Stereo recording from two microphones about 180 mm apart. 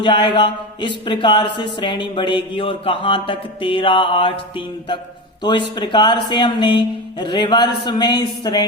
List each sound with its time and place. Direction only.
0.0 s speech: 25° left (ahead or behind)